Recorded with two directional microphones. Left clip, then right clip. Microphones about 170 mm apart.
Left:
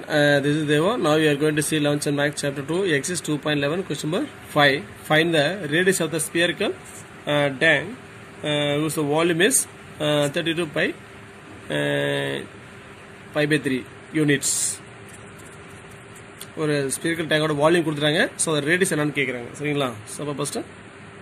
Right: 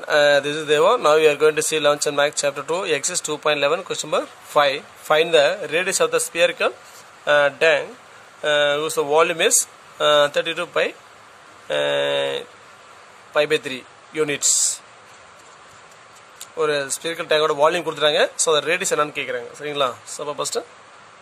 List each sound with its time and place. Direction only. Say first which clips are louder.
0.1 s speech: right 3 dB; 60° right (ahead or behind)
7.2 s speech: right 5 dB; 85° right
8.4 s speech: right 5 dB; 75° right (ahead or behind)
16.5 s speech: right 3 dB; 65° right (ahead or behind)